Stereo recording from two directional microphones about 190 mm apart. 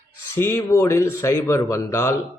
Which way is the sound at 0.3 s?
15° left (ahead or behind).